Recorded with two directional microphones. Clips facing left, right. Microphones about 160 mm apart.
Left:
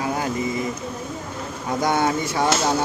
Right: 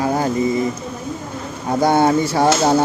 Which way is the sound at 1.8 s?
30° right (ahead or behind).